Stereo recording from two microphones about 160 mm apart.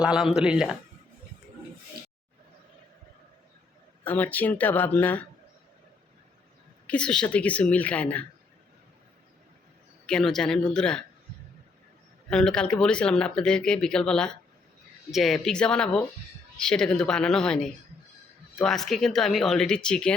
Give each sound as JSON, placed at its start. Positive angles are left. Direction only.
{"t": 0.0, "sound": "speech", "side_deg": -5}
{"t": 4.0, "sound": "speech", "side_deg": 10}
{"t": 6.8, "sound": "a woman's voice", "side_deg": 5}
{"t": 10.1, "sound": "speech", "side_deg": 5}
{"t": 12.3, "sound": "speech", "side_deg": 5}